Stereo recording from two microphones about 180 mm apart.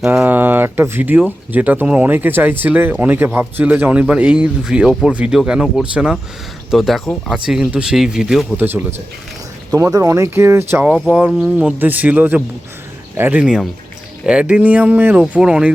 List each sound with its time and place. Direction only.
0.2 s speech: 10° right (ahead or behind)
8.5 s speech: 10° right (ahead or behind)